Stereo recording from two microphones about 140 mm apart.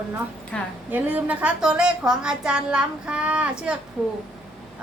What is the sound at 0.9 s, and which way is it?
A woman's voice, 10° right (ahead or behind).